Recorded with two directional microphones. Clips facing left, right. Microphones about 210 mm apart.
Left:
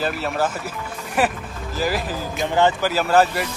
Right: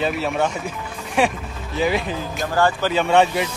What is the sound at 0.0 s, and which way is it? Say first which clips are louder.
Speech: right 2 dB; centre (ahead or behind).